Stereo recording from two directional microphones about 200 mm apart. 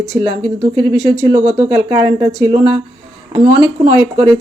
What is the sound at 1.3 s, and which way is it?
Speech, 30° right (ahead or behind).